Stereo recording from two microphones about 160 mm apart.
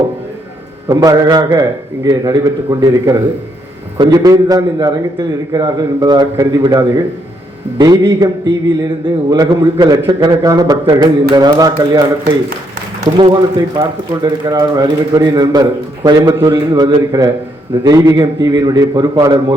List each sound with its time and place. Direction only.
0.9 s a man's voice: 20° right (ahead or behind)
13.1 s a man's voice: 25° right (ahead or behind)